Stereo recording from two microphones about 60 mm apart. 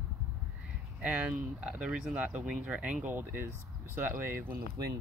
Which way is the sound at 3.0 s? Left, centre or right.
Right.